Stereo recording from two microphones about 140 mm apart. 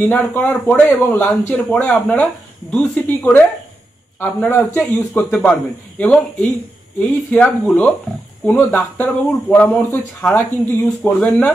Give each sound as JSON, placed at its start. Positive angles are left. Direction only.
{"t": 0.0, "sound": "a man's voice", "side_deg": 15}